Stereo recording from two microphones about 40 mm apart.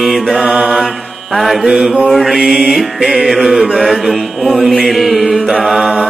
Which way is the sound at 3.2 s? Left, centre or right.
Centre.